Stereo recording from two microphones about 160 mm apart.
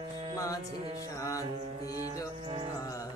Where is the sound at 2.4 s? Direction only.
30° right (ahead or behind).